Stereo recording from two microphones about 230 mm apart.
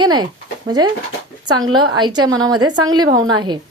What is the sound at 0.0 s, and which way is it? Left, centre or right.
Speech, centre.